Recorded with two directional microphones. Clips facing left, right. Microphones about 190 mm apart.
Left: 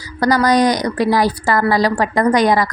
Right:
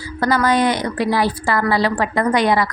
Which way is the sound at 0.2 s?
40° left (ahead or behind).